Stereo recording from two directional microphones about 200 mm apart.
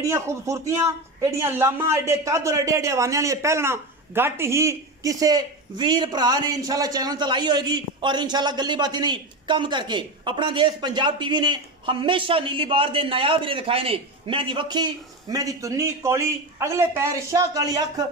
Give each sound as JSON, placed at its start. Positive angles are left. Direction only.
{"t": 0.0, "sound": "a man's voice", "side_deg": -15}